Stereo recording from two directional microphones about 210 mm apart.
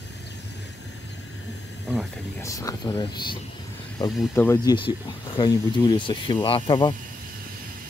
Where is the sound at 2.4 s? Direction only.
15° left (ahead or behind).